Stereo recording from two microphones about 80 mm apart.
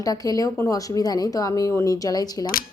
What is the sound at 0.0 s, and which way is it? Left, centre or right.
A woman's voice, left.